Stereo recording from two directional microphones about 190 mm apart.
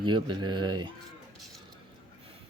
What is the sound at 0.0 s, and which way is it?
Speech, 25° right (ahead or behind).